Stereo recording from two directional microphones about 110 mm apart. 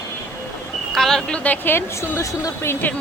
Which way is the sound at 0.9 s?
5° left (ahead or behind).